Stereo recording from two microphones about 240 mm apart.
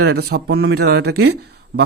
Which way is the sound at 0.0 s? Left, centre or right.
Right.